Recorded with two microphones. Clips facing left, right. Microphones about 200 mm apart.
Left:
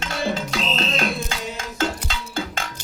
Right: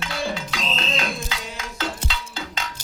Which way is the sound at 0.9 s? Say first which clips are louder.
Left 3 dB; 50° left (ahead or behind).